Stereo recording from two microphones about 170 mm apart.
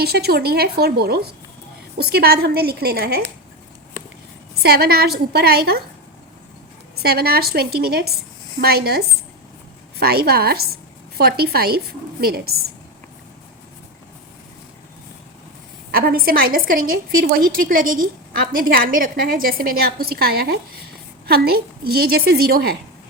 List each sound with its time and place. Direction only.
0.0 s a woman's voice: 70° right (ahead or behind)
4.6 s a woman's voice: 70° right (ahead or behind)
6.9 s a woman's voice: 70° right (ahead or behind)
15.9 s a woman's voice: 60° right (ahead or behind)